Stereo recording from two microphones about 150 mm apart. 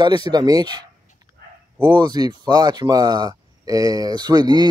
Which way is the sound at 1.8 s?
30° right (ahead or behind).